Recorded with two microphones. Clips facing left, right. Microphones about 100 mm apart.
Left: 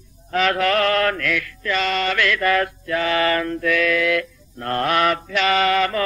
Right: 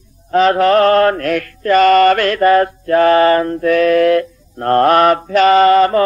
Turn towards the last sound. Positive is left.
turn(degrees=-35)  # may be behind; listen again after turning